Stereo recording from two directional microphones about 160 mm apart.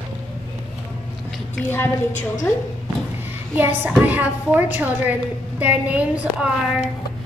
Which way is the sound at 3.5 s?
10° right (ahead or behind).